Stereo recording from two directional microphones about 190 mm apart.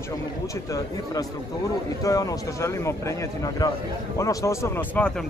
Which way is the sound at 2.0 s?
15° left (ahead or behind).